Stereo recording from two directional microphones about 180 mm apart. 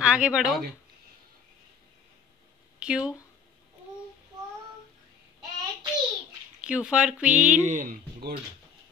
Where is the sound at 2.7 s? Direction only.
5° right (ahead or behind).